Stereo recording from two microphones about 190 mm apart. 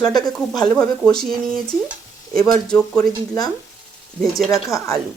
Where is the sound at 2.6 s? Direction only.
5° left (ahead or behind).